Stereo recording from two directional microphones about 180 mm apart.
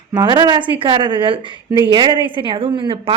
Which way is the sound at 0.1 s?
25° right (ahead or behind).